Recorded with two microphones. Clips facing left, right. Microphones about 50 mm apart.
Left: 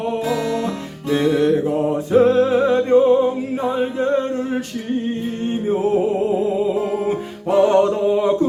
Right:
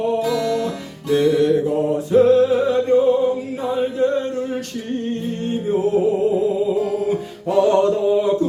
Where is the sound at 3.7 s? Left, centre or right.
Left.